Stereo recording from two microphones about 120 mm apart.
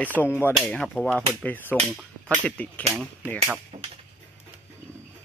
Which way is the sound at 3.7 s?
60° right (ahead or behind).